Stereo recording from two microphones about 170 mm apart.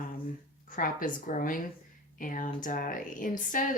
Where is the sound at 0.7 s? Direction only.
55° left (ahead or behind).